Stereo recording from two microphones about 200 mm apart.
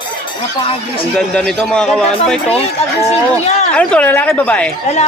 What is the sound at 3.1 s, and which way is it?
Speech, 35° left (ahead or behind).